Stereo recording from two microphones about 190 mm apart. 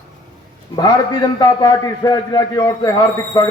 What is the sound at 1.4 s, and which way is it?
A man's voice, 20° left (ahead or behind).